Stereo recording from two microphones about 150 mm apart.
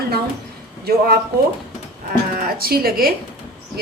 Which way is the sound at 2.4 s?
90° right.